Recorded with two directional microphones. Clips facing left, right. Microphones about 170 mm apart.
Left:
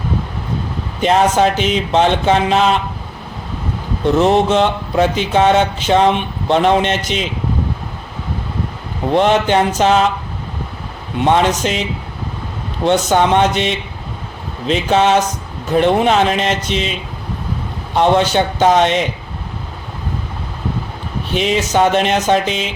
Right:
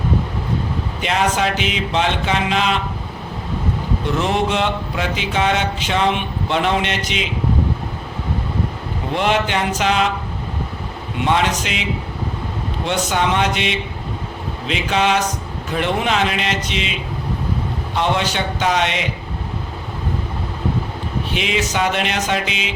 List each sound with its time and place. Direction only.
1.0 s mantra: 40° left (ahead or behind)
4.2 s mantra: 40° left (ahead or behind)
6.5 s a man's voice: 45° left (ahead or behind)
9.1 s mantra: 35° left (ahead or behind)
11.2 s mantra: 40° left (ahead or behind)
13.1 s mantra: 40° left (ahead or behind)
17.9 s a man's voice: 45° left (ahead or behind)
21.3 s mantra: 40° left (ahead or behind)